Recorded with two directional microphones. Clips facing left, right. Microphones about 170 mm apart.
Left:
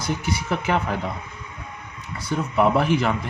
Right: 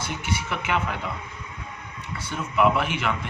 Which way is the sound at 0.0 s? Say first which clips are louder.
Left 4 dB; 40° left (ahead or behind).